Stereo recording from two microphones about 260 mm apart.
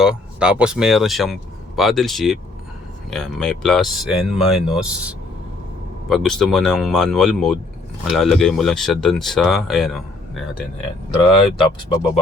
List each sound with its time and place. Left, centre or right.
0.0 s speech: centre
11.2 s speech: centre